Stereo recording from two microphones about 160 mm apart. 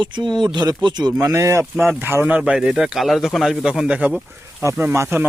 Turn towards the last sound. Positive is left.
turn(degrees=-15)  # may be behind; listen again after turning